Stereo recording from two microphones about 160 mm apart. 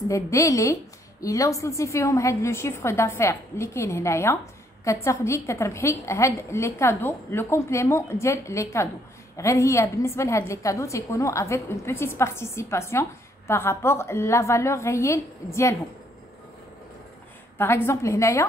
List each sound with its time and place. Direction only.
0.1 s a woman's voice: 20° left (ahead or behind)
17.6 s a woman's voice: 15° left (ahead or behind)